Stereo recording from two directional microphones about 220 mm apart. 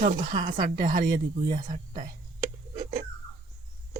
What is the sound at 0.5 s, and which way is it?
Speech, 40° right (ahead or behind).